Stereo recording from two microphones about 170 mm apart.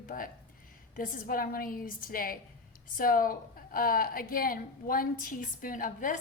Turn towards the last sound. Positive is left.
turn(degrees=50)  # may be behind; listen again after turning